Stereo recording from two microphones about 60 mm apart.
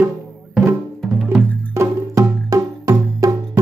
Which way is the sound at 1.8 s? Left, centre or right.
Right.